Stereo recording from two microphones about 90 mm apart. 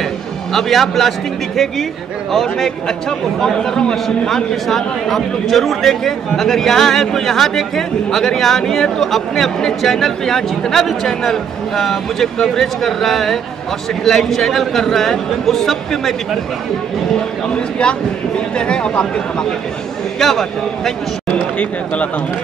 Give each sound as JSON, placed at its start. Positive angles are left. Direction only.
{"t": 0.5, "sound": "a man's voice", "side_deg": 0}
{"t": 2.3, "sound": "a man's voice", "side_deg": 5}
{"t": 17.6, "sound": "a man's voice", "side_deg": 10}
{"t": 21.3, "sound": "speech", "side_deg": 15}